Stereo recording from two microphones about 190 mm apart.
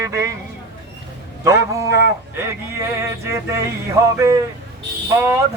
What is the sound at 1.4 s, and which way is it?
Speech, 15° right (ahead or behind).